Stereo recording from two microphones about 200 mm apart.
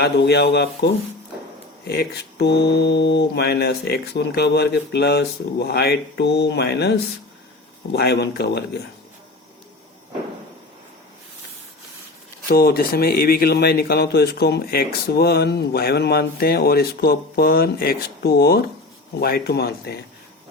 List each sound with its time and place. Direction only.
0.0 s speech: 55° left (ahead or behind)
1.9 s speech: 55° left (ahead or behind)
7.9 s speech: 55° left (ahead or behind)
12.5 s a man's voice: 50° left (ahead or behind)